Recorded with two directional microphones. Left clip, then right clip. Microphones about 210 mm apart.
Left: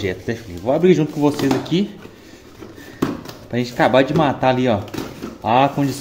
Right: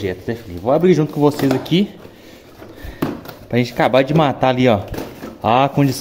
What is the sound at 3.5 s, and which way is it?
Speech, 20° right (ahead or behind).